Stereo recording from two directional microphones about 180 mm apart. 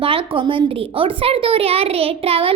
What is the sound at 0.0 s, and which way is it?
A woman's voice, 30° right (ahead or behind).